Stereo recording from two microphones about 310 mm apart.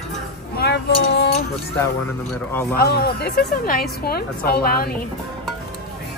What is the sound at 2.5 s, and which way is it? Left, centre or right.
Speech, centre.